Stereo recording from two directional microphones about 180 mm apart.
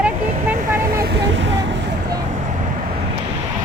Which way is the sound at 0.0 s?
10° right (ahead or behind).